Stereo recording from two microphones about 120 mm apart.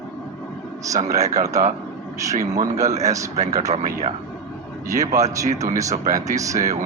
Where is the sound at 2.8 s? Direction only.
70° right (ahead or behind).